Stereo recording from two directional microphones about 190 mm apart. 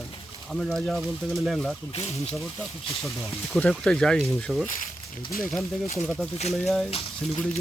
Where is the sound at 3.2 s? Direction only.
Centre (ahead or behind).